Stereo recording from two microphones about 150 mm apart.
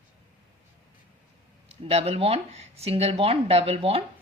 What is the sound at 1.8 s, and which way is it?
Speech, 40° right (ahead or behind).